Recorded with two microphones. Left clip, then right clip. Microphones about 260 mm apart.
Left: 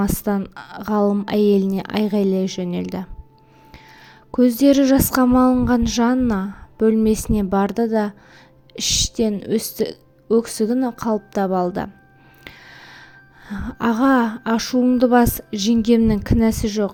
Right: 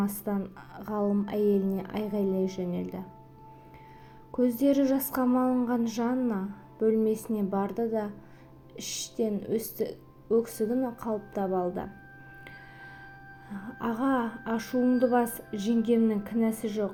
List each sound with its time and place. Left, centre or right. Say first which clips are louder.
0.3 s a woman's voice: left 10 dB; left
4.6 s a woman's voice: left 11 dB; left
13.5 s a woman's voice: left 12 dB; left
14.7 s music: left 8 dB; left